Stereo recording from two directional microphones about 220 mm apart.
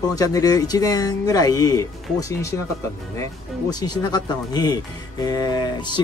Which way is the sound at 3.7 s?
20° left (ahead or behind).